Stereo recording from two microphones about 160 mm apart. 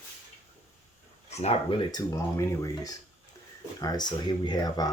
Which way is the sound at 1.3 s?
40° left (ahead or behind).